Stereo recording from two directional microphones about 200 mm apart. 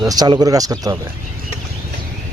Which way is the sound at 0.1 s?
20° right (ahead or behind).